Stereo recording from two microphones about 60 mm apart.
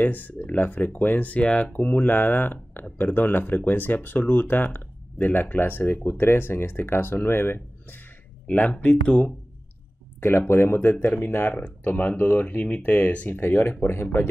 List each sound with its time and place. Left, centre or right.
0.0 s speech: left
8.5 s speech: left
10.2 s speech: left
13.4 s speech: left